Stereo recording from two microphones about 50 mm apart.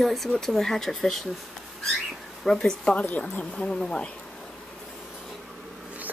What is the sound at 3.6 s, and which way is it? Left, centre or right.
Speech, centre.